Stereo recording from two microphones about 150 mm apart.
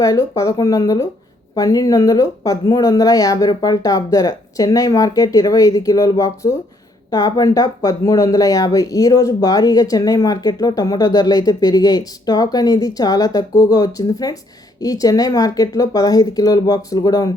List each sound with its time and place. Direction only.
0.0 s speech: 20° left (ahead or behind)